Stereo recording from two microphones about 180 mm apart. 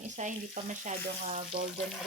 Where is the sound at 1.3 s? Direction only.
45° right (ahead or behind).